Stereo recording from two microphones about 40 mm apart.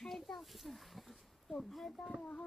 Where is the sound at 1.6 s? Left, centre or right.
Centre.